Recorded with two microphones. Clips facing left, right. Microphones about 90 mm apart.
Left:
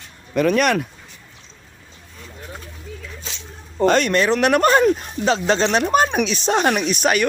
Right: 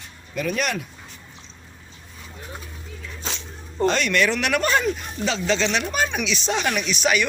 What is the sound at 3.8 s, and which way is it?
Speech, 45° left (ahead or behind).